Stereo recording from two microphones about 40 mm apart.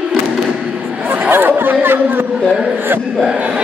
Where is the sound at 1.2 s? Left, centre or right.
Right.